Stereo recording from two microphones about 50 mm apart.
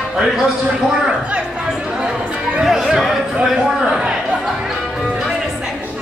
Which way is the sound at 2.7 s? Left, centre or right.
Centre.